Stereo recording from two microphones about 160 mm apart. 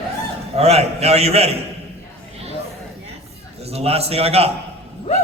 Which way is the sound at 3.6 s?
40° right (ahead or behind).